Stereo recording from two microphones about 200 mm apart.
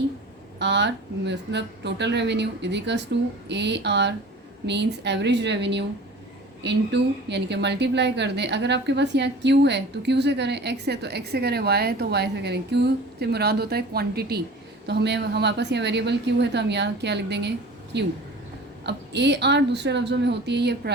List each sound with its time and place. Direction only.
0.6 s a woman's voice: 60° right (ahead or behind)